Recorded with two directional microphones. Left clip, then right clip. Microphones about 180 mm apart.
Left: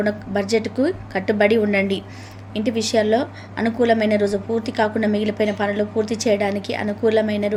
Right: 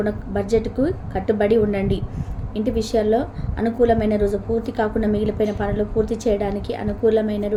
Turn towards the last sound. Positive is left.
turn(degrees=20)  # may be behind; listen again after turning